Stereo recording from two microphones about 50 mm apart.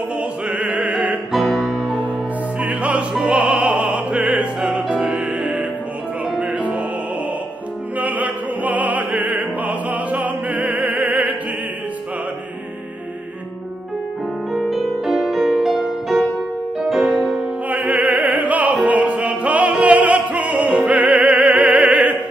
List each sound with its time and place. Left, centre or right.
0.6 s music: right
1.3 s music: centre
2.6 s opera: right
4.6 s music: centre
6.3 s music: right
8.0 s opera: right
14.5 s music: centre
17.6 s opera: right; by 20.9 s centre
20.9 s opera: right